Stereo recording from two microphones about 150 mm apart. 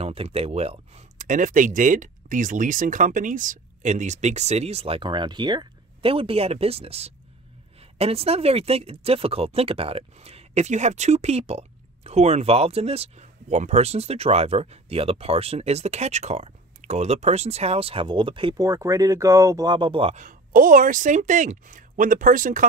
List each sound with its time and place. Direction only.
0.0 s speech: 40° right (ahead or behind)
1.1 s speech: 60° right (ahead or behind); by 18.6 s 35° right (ahead or behind)
18.6 s speech: 20° right (ahead or behind)
20.2 s speech: 65° right (ahead or behind)